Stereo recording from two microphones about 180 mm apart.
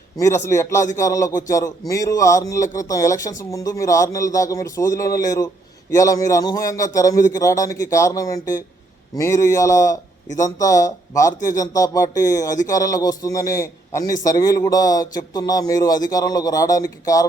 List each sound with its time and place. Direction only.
0.2 s speech: 15° left (ahead or behind)